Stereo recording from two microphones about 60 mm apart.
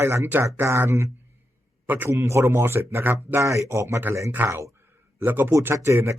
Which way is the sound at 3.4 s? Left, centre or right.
Right.